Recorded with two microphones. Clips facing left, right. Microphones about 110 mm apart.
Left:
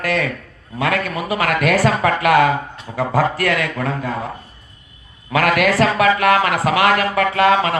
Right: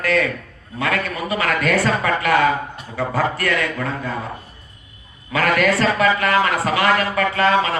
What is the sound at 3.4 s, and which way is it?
Speech, 65° left (ahead or behind).